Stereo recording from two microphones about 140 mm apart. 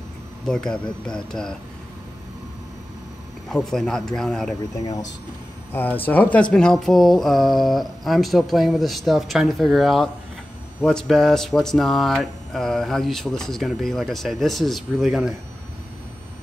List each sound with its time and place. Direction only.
1.0 s speech: 5° left (ahead or behind)
3.4 s speech: 5° left (ahead or behind)
4.7 s speech: 25° left (ahead or behind)
5.7 s speech: 15° left (ahead or behind); by 15.3 s centre (ahead or behind)